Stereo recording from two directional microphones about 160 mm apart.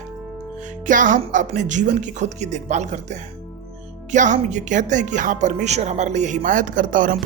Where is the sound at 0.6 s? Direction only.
55° right (ahead or behind).